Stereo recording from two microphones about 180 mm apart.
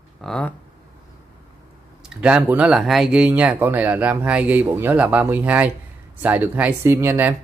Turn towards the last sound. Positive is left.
turn(degrees=-10)  # may be behind; listen again after turning